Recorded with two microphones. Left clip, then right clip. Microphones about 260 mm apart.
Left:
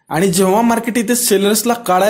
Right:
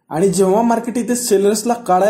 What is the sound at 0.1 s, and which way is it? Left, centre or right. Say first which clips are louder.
A man's voice: left 1 dB; left.